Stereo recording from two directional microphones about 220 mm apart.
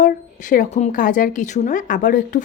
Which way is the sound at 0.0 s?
35° left (ahead or behind).